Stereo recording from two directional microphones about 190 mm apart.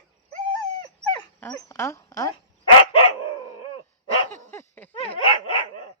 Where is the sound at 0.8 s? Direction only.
15° left (ahead or behind).